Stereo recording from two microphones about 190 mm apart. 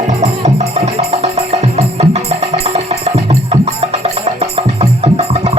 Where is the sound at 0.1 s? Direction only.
35° right (ahead or behind).